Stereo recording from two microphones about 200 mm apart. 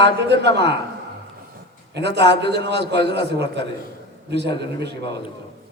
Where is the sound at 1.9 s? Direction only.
60° right (ahead or behind).